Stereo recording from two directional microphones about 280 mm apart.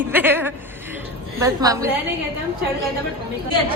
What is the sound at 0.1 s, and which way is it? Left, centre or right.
A woman's voice, centre.